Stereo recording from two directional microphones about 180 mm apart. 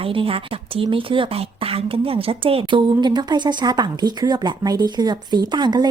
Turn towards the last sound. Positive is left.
turn(degrees=-25)  # may be behind; listen again after turning